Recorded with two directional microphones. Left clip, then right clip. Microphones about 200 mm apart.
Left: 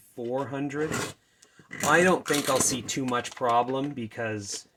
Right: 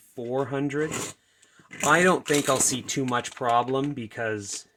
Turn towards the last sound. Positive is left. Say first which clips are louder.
# right 2 dB
turn(degrees=-45)  # may be behind; listen again after turning